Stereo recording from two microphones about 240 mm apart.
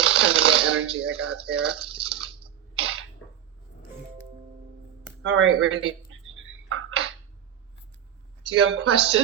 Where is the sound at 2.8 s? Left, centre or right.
Right.